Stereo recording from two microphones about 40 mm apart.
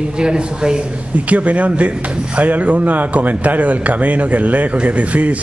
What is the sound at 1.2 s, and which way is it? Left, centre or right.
A man's voice, right.